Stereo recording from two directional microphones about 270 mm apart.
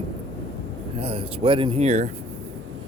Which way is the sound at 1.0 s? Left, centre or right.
Right.